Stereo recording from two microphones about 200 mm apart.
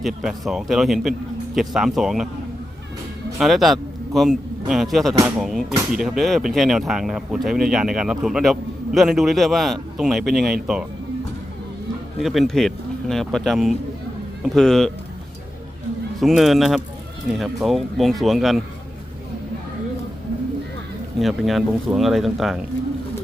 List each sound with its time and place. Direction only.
0.0 s speech: centre (ahead or behind)
3.3 s a man's voice: centre (ahead or behind)
12.2 s speech: centre (ahead or behind)
16.2 s speech: centre (ahead or behind)
21.2 s speech: centre (ahead or behind)